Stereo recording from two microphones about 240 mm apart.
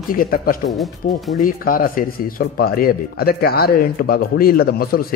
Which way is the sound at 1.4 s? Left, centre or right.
Left.